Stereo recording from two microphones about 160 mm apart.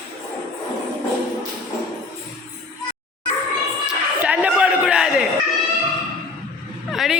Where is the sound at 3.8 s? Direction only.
10° right (ahead or behind).